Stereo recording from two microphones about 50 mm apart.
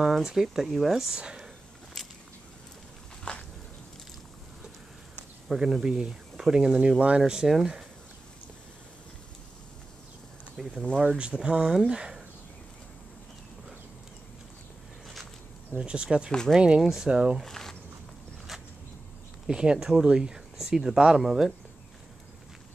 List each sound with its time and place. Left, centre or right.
0.0 s speech: centre
1.1 s speech: centre
2.0 s a sound: centre
3.3 s a sound: centre
5.5 s speech: centre
10.6 s speech: centre
11.1 s speech: centre
15.7 s speech: right
16.3 s speech: centre
16.5 s speech: centre
16.8 s speech: centre
17.1 s speech: centre
17.5 s a sound: centre
19.4 s speech: centre